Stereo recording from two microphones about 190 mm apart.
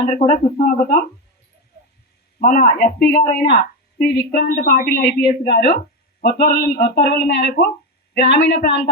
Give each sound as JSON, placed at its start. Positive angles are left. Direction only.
{"t": 0.1, "sound": "a woman's voice", "side_deg": 40}
{"t": 2.4, "sound": "a woman's voice", "side_deg": 50}